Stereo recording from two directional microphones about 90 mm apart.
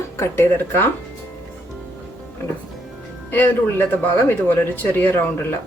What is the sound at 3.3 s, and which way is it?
Speech, 20° left (ahead or behind).